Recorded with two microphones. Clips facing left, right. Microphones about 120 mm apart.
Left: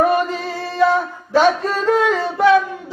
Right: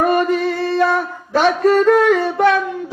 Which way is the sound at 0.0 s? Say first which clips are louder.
Right 2 dB; 60° right (ahead or behind).